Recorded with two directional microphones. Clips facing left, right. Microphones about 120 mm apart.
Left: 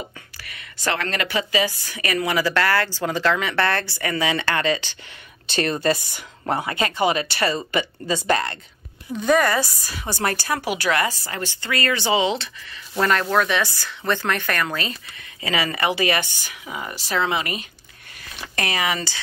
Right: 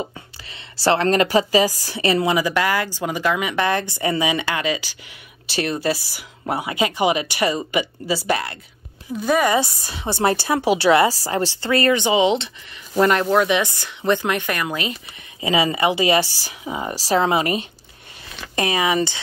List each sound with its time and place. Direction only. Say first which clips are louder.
0.4 s a woman's voice: right 7 dB; 25° right (ahead or behind); by 9.5 s 5° right (ahead or behind)
9.5 s a woman's voice: right 3 dB; 25° right (ahead or behind)
16.3 s a woman's voice: right 5 dB; 35° right (ahead or behind)
18.2 s speech: right 4 dB; 20° right (ahead or behind)